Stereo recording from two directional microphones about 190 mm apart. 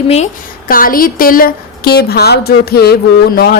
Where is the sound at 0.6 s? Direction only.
50° left (ahead or behind).